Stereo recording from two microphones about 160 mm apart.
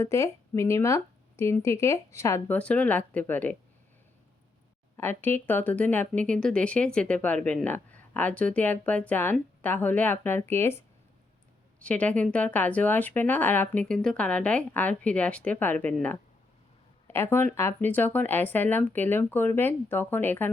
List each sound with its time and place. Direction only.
0.0 s speech: 20° left (ahead or behind)
4.9 s speech: 15° left (ahead or behind)